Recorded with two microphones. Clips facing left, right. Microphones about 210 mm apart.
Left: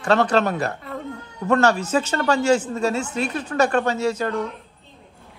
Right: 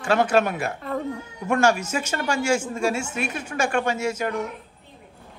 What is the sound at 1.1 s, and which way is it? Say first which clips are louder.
Speech: left 4 dB; 10° right (ahead or behind).